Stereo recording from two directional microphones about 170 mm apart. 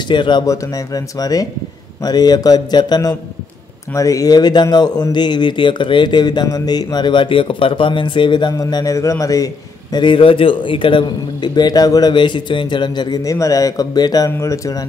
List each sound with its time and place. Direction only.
0.1 s speech: 25° left (ahead or behind)